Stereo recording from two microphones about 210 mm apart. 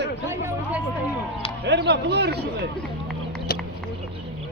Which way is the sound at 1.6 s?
55° right (ahead or behind).